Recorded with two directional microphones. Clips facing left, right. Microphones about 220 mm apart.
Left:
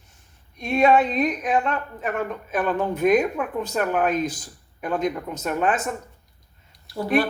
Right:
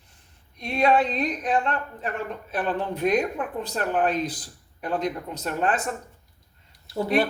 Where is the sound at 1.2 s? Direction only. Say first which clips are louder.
Left 2 dB; 35° right (ahead or behind).